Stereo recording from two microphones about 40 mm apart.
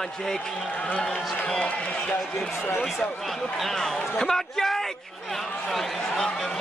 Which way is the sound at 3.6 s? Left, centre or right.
Centre.